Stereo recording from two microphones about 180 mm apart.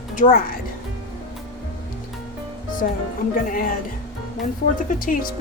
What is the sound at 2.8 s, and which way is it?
Speech, 50° left (ahead or behind).